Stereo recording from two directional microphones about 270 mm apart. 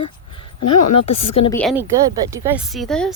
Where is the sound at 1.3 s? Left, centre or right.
Centre.